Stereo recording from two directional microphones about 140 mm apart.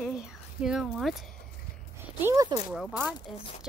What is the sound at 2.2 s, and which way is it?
Speech, 20° right (ahead or behind).